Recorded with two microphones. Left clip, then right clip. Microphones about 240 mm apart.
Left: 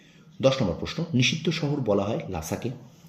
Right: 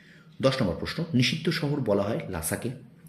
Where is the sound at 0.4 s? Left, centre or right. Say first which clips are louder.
Left 2 dB; centre.